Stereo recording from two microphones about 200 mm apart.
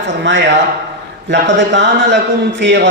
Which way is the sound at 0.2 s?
60° right (ahead or behind).